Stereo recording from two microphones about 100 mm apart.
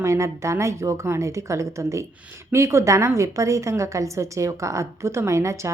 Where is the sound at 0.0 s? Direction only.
30° right (ahead or behind).